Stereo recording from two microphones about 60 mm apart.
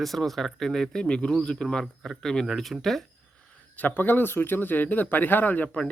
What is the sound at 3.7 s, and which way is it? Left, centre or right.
Speech, left.